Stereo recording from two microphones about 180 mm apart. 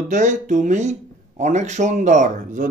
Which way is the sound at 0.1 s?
45° right (ahead or behind).